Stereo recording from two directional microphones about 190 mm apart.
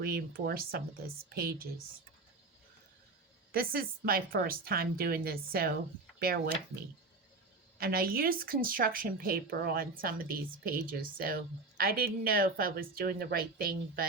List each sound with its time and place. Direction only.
0.0 s speech: 50° right (ahead or behind)
3.5 s speech: 50° right (ahead or behind)
7.8 s speech: 50° right (ahead or behind)